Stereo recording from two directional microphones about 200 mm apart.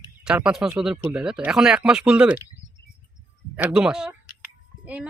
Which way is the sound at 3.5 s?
5° right (ahead or behind).